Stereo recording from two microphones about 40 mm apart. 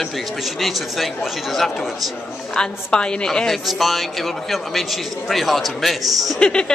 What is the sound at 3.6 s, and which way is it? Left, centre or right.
A man's voice, centre.